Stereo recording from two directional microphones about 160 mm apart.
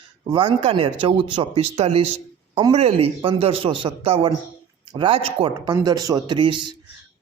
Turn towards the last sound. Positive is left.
turn(degrees=-30)  # may be behind; listen again after turning